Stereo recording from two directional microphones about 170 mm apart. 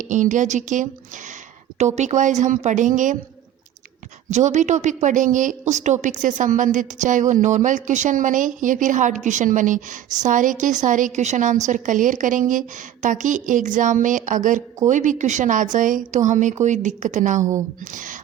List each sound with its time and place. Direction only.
0.0 s speech: 50° right (ahead or behind)
4.3 s speech: 45° right (ahead or behind)